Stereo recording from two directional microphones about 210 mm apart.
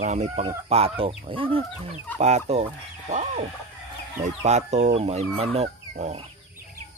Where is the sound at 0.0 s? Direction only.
35° right (ahead or behind).